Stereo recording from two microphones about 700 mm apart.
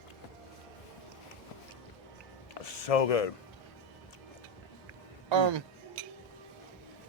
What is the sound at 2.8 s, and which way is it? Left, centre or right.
Speech, left.